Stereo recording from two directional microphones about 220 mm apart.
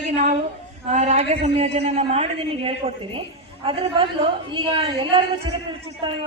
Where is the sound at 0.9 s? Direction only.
30° right (ahead or behind).